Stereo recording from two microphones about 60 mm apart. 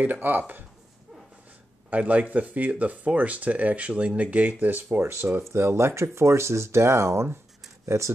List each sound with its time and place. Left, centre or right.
0.0 s speech: right
1.9 s speech: right
5.5 s speech: right